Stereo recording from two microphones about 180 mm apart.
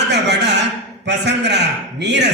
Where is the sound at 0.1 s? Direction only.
70° right (ahead or behind).